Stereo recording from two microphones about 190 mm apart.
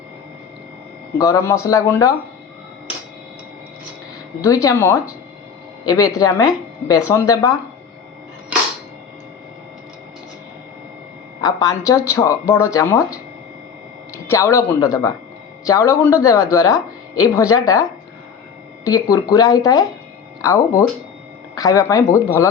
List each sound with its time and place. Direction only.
1.2 s speech: 15° left (ahead or behind)
4.4 s speech: 15° left (ahead or behind)
11.3 s speech: 20° left (ahead or behind)
14.3 s speech: 15° left (ahead or behind)
18.9 s speech: 20° left (ahead or behind)